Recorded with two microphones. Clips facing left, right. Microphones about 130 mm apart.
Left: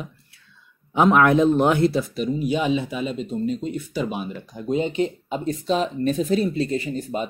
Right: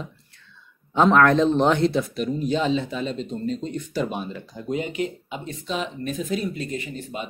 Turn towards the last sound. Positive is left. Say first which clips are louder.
# left 6 dB
turn(degrees=40)  # may be behind; listen again after turning